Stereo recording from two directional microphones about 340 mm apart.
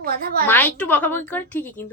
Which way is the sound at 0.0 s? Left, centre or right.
Right.